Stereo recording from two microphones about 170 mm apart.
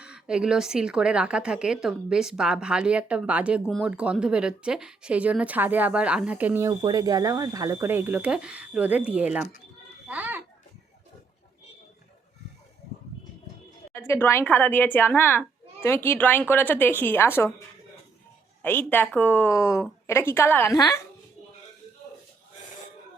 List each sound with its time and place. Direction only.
0.0 s a woman's voice: 5° right (ahead or behind)
10.1 s a sound: 10° right (ahead or behind)
13.9 s speech: 15° left (ahead or behind)
18.6 s speech: 10° left (ahead or behind)